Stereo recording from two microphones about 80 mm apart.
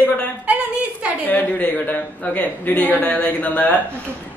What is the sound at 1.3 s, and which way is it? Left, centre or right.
A man's voice, left.